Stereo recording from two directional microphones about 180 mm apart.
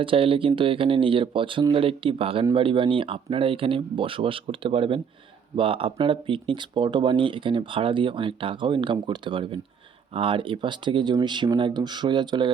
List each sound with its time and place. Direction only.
0.0 s speech: 30° right (ahead or behind)